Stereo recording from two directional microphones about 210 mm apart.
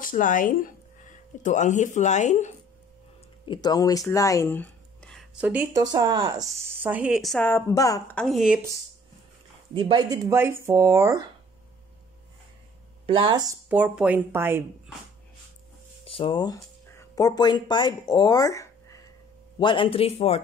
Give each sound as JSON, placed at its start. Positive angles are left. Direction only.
{"t": 0.0, "sound": "speech", "side_deg": 40}
{"t": 3.4, "sound": "speech", "side_deg": 20}
{"t": 4.1, "sound": "a sound", "side_deg": 15}
{"t": 5.4, "sound": "speech", "side_deg": -5}
{"t": 8.2, "sound": "speech", "side_deg": 0}
{"t": 9.8, "sound": "speech", "side_deg": -20}
{"t": 13.0, "sound": "speech", "side_deg": -25}
{"t": 13.7, "sound": "speech", "side_deg": -5}
{"t": 16.0, "sound": "a man's voice", "side_deg": 25}